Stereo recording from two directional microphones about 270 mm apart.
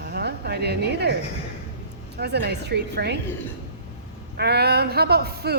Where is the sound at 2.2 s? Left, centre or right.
Right.